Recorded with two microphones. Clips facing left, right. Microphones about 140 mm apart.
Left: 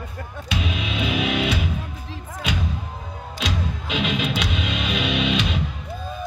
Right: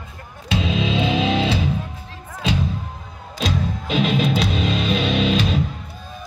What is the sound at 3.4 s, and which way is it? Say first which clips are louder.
Music: right 5 dB; 40° right (ahead or behind).